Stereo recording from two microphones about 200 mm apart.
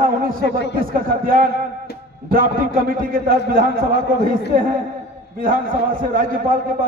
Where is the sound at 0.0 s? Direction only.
45° right (ahead or behind).